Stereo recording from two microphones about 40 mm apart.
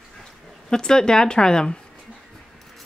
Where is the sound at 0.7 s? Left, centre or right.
Centre.